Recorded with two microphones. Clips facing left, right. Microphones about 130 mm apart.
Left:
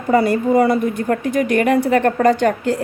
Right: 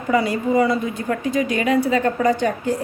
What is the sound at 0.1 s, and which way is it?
A woman's voice, 45° left (ahead or behind).